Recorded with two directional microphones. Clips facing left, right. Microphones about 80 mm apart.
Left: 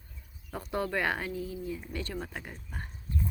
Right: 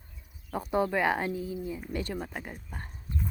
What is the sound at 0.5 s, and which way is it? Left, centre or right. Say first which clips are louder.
Speech: right 4 dB; centre.